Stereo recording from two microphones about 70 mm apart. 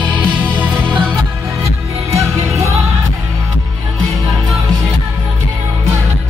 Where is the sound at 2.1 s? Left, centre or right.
Right.